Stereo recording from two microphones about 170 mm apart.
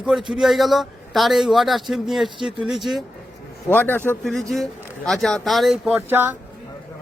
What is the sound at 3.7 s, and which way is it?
A man's voice, 10° left (ahead or behind).